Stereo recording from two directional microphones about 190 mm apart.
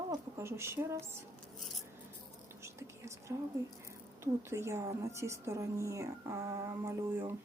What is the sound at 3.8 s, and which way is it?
A woman's voice, 15° right (ahead or behind).